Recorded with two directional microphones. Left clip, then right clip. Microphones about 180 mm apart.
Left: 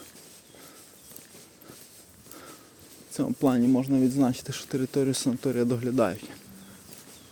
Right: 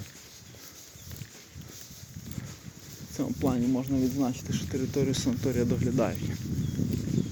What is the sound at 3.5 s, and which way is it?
Speech, 45° left (ahead or behind).